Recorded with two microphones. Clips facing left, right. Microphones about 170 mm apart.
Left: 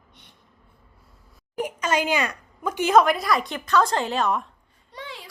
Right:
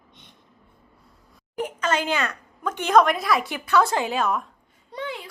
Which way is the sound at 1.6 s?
10° left (ahead or behind).